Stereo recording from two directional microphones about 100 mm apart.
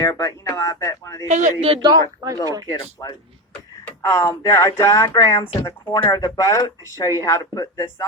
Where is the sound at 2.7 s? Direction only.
40° left (ahead or behind).